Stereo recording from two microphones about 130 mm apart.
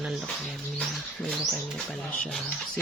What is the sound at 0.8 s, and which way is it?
Speech, 10° left (ahead or behind).